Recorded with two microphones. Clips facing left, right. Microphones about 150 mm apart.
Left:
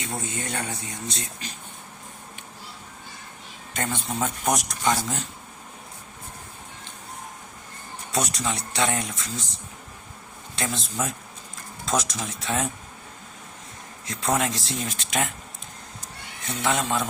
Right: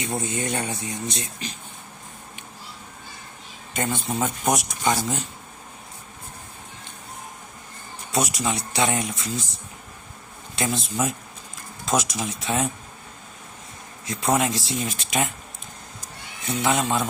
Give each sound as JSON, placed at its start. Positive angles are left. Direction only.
{"t": 0.0, "sound": "speech", "side_deg": -15}
{"t": 3.8, "sound": "speech", "side_deg": -10}
{"t": 8.1, "sound": "speech", "side_deg": -5}
{"t": 10.5, "sound": "speech", "side_deg": -10}
{"t": 14.1, "sound": "speech", "side_deg": -10}
{"t": 16.5, "sound": "speech", "side_deg": -10}